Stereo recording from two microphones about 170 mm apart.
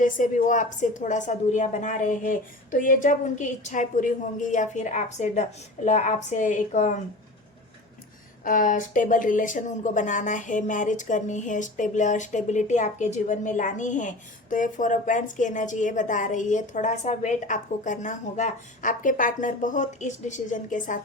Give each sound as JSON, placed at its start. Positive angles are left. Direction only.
{"t": 0.0, "sound": "a woman's voice", "side_deg": 50}
{"t": 8.4, "sound": "a woman's voice", "side_deg": 50}